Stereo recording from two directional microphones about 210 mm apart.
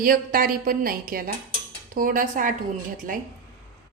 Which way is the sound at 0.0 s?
45° right (ahead or behind).